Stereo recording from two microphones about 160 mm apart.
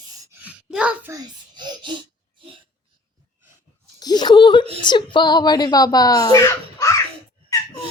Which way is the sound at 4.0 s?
25° left (ahead or behind).